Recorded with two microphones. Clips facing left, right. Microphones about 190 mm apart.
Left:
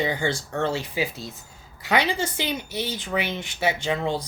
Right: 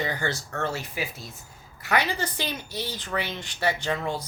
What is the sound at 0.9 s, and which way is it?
Speech, 30° left (ahead or behind).